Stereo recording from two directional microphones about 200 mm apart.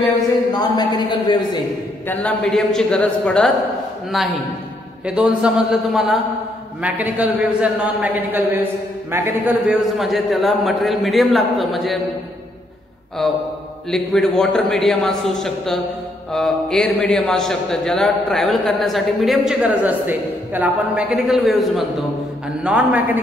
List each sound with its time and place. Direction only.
0.5 s speech: 20° left (ahead or behind)
2.0 s a man's voice: 5° left (ahead or behind)
13.2 s a man's voice: 5° left (ahead or behind)